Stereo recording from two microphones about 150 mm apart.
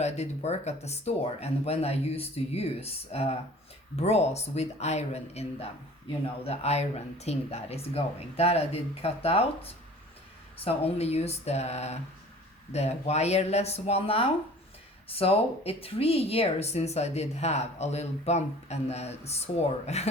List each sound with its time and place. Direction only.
0.0 s speech: 45° left (ahead or behind)
10.6 s speech: 40° left (ahead or behind)